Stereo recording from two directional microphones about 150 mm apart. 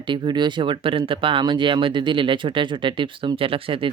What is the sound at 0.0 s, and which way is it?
Speech, 30° right (ahead or behind).